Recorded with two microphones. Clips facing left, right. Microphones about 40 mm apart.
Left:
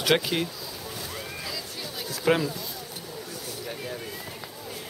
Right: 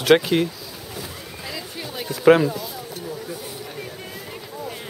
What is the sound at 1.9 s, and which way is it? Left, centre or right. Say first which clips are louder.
Speech: right 9 dB; right.